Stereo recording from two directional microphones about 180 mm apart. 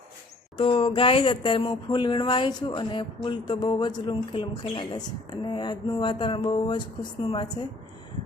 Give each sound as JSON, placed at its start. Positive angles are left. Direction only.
{"t": 0.5, "sound": "speech", "side_deg": 30}